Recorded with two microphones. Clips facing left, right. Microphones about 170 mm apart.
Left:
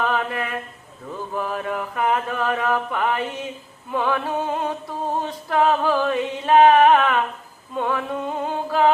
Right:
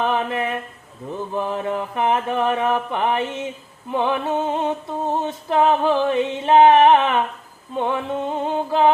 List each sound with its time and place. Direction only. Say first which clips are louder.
0.0 s mantra: right 2 dB; 25° right (ahead or behind)